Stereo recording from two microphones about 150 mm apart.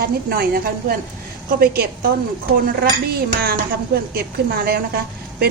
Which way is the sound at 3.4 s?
90° right.